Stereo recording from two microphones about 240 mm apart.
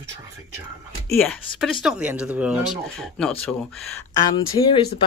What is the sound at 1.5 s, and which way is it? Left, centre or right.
Speech, left.